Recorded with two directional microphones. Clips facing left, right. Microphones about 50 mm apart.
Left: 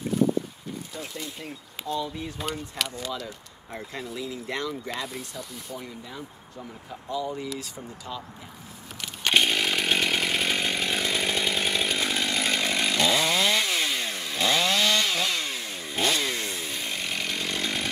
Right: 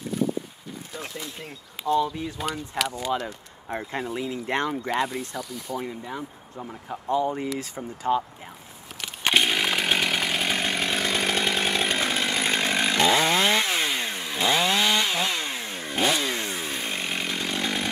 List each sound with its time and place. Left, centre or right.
2.8 s speech: centre
3.3 s speech: right
9.3 s chainsaw: centre
10.6 s chainsaw: right
11.1 s chainsaw: right
11.5 s chainsaw: right
11.8 s chainsaw: right
12.1 s chainsaw: right
16.0 s chainsaw: centre